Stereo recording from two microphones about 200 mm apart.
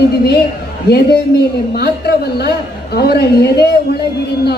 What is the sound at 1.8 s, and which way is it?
A man's voice, 55° left (ahead or behind).